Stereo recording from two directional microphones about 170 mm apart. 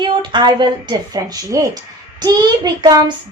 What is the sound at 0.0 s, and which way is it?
A woman's voice, 25° right (ahead or behind).